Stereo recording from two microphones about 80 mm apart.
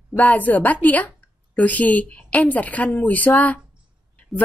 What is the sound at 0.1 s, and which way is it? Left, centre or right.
A woman's voice, centre.